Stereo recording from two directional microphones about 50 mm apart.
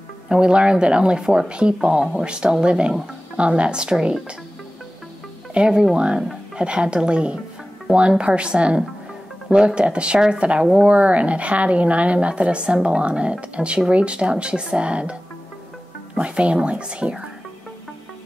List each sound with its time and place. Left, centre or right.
0.3 s speech: right
5.5 s speech: centre
16.2 s speech: right